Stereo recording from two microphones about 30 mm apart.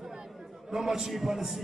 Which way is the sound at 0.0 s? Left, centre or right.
Centre.